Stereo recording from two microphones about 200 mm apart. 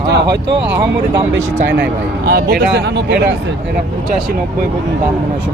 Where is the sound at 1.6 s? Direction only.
60° right (ahead or behind).